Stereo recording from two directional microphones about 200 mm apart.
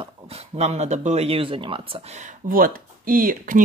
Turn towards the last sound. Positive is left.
turn(degrees=-45)  # may be behind; listen again after turning